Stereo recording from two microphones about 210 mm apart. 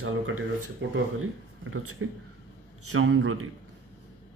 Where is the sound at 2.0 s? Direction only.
75° right (ahead or behind).